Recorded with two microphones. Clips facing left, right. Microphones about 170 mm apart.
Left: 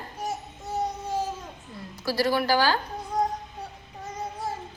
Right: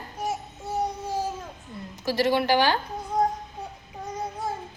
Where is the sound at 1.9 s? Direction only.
20° right (ahead or behind).